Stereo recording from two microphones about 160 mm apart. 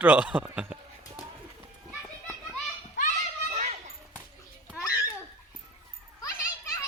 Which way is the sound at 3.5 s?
45° right (ahead or behind).